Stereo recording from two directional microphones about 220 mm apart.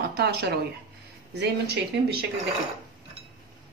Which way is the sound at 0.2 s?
50° right (ahead or behind).